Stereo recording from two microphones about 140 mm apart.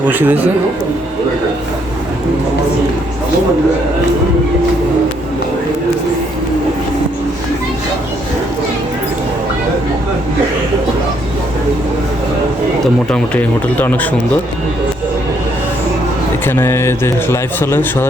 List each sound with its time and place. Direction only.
0.1 s speech: 15° right (ahead or behind)
12.8 s speech: 5° left (ahead or behind)
16.5 s speech: 15° left (ahead or behind)